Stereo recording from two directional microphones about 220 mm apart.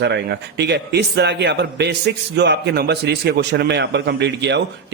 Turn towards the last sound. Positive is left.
turn(degrees=-50)  # may be behind; listen again after turning